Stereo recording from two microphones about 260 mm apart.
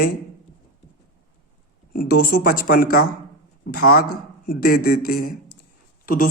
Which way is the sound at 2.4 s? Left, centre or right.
Left.